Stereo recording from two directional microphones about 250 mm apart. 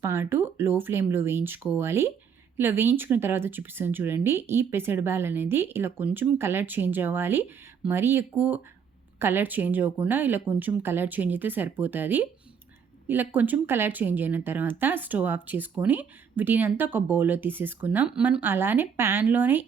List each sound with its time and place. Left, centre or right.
0.0 s speech: centre